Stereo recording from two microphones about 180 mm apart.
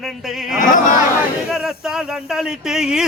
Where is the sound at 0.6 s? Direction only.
50° left (ahead or behind).